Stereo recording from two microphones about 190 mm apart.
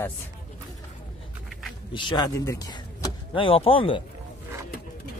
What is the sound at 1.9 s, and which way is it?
Speech, 25° left (ahead or behind).